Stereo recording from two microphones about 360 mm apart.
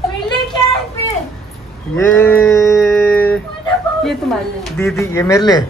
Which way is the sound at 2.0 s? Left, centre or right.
Centre.